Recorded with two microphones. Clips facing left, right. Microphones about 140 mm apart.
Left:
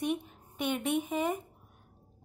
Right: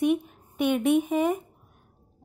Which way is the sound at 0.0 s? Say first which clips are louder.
Right 9 dB; 15° right (ahead or behind).